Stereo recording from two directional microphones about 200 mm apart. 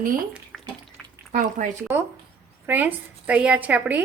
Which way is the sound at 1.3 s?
40° right (ahead or behind).